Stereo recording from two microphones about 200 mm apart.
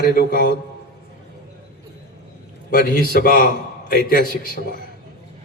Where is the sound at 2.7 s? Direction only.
45° left (ahead or behind).